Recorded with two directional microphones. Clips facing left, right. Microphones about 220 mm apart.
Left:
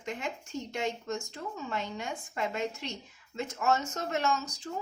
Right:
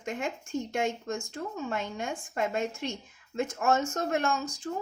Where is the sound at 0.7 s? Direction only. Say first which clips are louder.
Right 1 dB; 50° right (ahead or behind).